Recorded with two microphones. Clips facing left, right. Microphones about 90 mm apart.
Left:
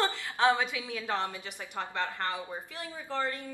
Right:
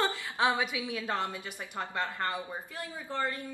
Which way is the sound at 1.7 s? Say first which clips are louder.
Even; 10° right (ahead or behind).